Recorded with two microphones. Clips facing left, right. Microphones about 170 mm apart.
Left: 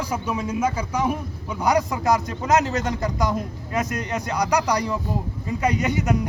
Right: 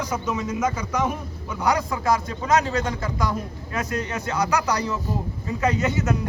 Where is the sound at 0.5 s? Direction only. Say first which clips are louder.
Left 1 dB; 30° left (ahead or behind).